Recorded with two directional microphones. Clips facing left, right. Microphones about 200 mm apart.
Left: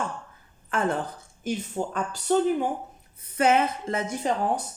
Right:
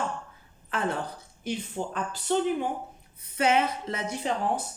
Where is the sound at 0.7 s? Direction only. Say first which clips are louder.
Left 3 dB; 45° left (ahead or behind).